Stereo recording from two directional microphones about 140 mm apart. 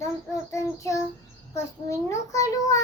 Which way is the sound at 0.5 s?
20° left (ahead or behind).